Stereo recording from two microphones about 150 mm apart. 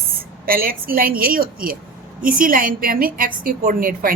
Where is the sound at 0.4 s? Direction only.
80° right.